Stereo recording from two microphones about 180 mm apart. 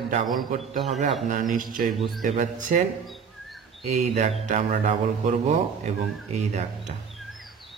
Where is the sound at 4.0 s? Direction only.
45° right (ahead or behind).